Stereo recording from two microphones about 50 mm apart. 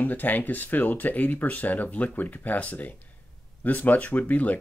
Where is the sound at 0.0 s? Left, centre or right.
Left.